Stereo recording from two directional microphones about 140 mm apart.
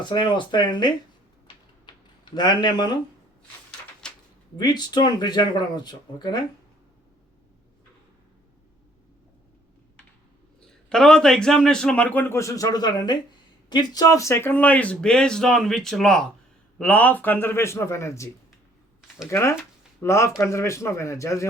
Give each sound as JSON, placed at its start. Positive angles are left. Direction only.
{"t": 0.0, "sound": "speech", "side_deg": 35}
{"t": 2.3, "sound": "speech", "side_deg": 30}
{"t": 4.5, "sound": "speech", "side_deg": 30}
{"t": 10.7, "sound": "speech", "side_deg": 5}
{"t": 19.3, "sound": "a man's voice", "side_deg": 20}